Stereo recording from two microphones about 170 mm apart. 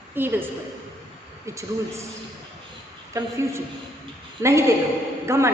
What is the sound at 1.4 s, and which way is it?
Speech, 15° right (ahead or behind).